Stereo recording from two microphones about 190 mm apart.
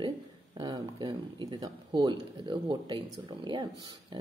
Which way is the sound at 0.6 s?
20° right (ahead or behind).